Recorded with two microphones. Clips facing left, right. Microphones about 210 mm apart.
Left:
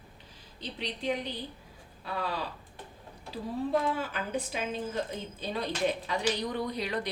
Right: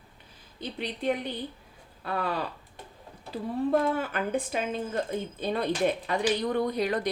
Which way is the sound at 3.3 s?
55° right (ahead or behind).